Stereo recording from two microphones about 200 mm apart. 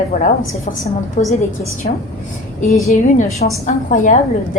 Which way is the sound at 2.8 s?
35° left (ahead or behind).